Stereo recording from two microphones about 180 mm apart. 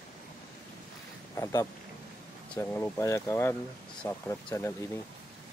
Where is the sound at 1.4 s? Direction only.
20° left (ahead or behind).